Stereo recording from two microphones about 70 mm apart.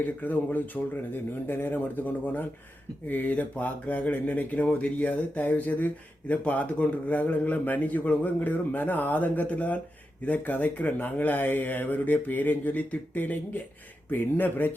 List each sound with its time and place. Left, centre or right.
0.0 s speech: left